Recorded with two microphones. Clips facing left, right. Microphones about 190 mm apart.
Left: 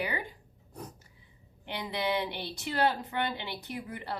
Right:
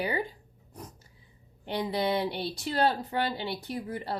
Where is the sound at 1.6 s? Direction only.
40° right (ahead or behind).